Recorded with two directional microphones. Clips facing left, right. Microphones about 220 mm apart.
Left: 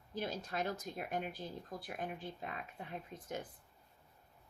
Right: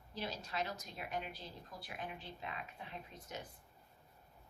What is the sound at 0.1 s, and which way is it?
Speech, 50° left (ahead or behind).